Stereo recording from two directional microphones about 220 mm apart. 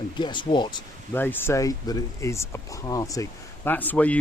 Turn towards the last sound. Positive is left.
turn(degrees=5)  # may be behind; listen again after turning